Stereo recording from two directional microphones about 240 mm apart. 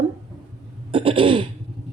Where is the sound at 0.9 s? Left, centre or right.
Right.